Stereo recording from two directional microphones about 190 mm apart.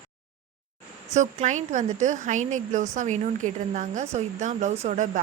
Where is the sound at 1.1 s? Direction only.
40° right (ahead or behind).